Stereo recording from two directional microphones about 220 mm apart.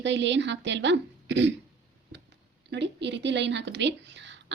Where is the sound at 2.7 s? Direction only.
55° right (ahead or behind).